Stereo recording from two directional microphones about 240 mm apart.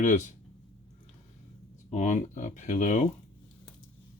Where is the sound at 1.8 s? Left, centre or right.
Left.